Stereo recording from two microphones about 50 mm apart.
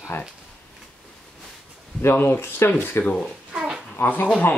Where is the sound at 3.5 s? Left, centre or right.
Centre.